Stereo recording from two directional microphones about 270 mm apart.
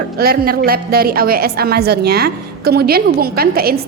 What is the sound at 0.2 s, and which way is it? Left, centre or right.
A woman's voice, right.